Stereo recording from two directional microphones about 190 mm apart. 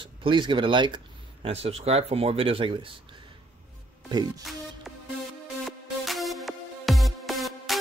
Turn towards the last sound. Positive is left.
turn(degrees=0)  # may be behind; listen again after turning